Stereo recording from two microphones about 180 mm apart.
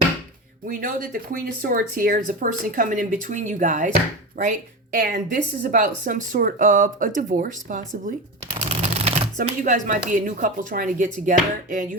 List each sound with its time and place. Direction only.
0.7 s speech: 50° right (ahead or behind)
8.7 s speech: 35° right (ahead or behind)